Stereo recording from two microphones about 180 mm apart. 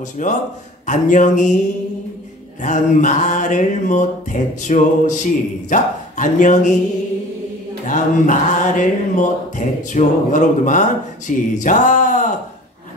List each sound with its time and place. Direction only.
0.2 s music: 45° left (ahead or behind)
2.6 s music: 45° left (ahead or behind)
7.8 s music: 45° left (ahead or behind)
11.2 s speech: 45° left (ahead or behind)